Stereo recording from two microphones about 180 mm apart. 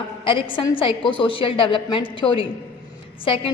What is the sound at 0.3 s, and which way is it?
A woman's voice, 30° left (ahead or behind).